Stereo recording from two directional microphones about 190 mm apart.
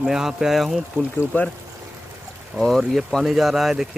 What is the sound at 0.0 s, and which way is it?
Speech, 5° right (ahead or behind).